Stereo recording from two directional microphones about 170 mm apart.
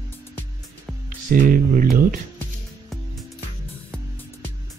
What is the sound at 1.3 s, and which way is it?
Speech, 55° right (ahead or behind).